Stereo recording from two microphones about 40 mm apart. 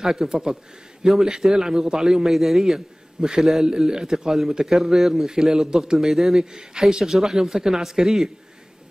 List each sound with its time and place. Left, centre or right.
0.0 s a man's voice: centre
6.5 s a man's voice: centre